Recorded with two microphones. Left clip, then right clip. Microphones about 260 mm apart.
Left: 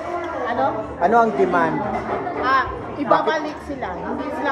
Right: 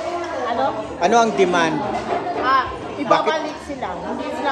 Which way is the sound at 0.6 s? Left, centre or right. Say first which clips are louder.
Left 1 dB; right.